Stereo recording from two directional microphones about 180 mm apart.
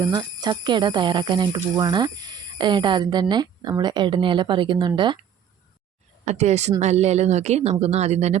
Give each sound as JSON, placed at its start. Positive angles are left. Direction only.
{"t": 0.0, "sound": "speech", "side_deg": -25}
{"t": 6.2, "sound": "speech", "side_deg": -40}